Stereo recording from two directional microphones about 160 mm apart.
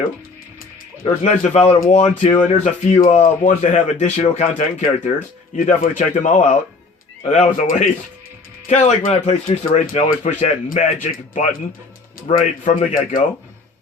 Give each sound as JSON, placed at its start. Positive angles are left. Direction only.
{"t": 1.0, "sound": "speech", "side_deg": 40}
{"t": 12.6, "sound": "a man's voice", "side_deg": 55}